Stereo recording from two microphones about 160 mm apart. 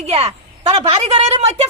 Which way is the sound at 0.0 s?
40° right (ahead or behind).